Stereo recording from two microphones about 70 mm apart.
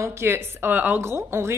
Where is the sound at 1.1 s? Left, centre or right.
Right.